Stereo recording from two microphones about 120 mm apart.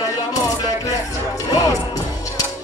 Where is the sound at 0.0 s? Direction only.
30° left (ahead or behind).